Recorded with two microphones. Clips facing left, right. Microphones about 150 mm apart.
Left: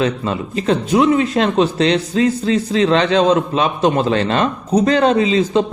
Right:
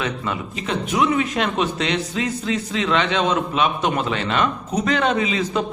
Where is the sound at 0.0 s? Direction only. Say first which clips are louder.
Left 7 dB; 35° left (ahead or behind).